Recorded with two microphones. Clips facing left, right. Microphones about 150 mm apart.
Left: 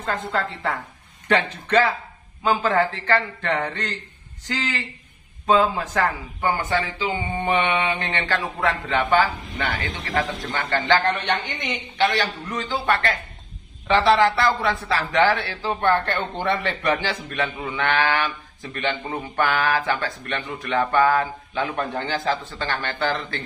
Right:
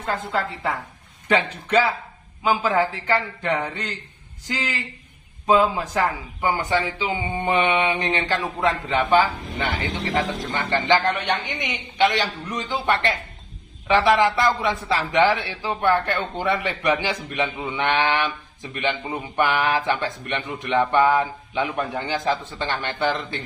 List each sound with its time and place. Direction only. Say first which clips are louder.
0.0 s speech: even; 10° right (ahead or behind)
12.0 s speech: right 2 dB; 20° right (ahead or behind)